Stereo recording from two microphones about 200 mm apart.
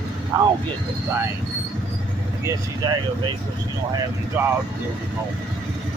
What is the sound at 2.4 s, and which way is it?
Speech, 20° right (ahead or behind).